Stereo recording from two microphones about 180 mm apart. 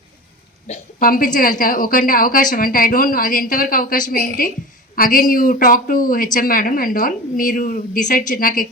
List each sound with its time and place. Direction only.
0.9 s a woman's voice: 55° left (ahead or behind)